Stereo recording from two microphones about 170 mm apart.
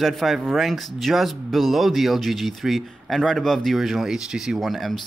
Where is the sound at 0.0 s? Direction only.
Centre (ahead or behind).